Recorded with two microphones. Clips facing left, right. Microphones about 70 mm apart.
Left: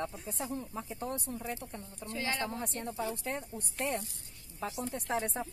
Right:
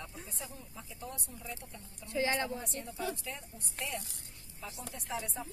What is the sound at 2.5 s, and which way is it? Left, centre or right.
Speech, left.